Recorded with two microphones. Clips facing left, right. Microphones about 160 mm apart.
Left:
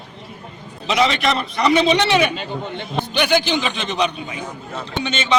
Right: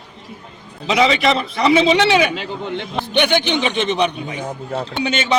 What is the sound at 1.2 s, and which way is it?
Speech, 25° right (ahead or behind).